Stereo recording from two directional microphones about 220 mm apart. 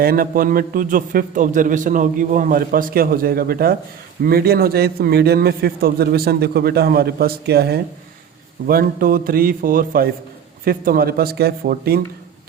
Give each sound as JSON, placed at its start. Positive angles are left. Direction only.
{"t": 0.0, "sound": "a man's voice", "side_deg": -40}